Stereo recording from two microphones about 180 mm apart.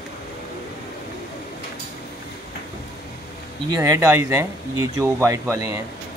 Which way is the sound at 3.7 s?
15° right (ahead or behind).